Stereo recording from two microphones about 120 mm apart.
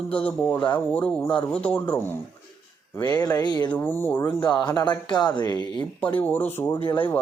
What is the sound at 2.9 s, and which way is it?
Speech, 30° left (ahead or behind).